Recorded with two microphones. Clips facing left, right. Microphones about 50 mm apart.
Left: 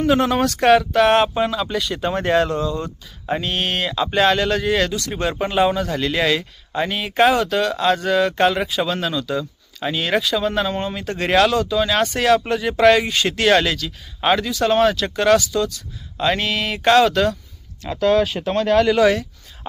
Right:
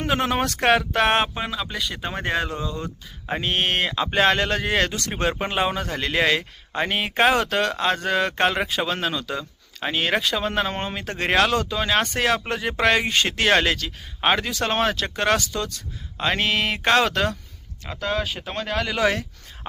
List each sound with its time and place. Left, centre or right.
0.2 s speech: centre
1.3 s speech: centre
3.4 s speech: right
9.3 s a sound: centre
10.2 s speech: right
11.5 s speech: right
18.0 s speech: centre
18.9 s speech: right